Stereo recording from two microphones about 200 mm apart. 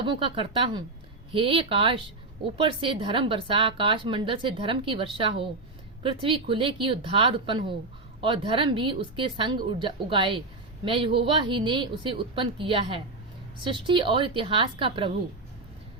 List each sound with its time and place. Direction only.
0.0 s a woman's voice: 25° right (ahead or behind)